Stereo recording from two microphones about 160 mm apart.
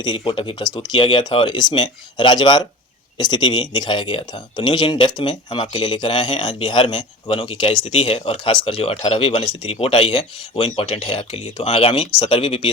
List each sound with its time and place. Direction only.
0.0 s speech: 30° left (ahead or behind)
7.9 s speech: 40° left (ahead or behind)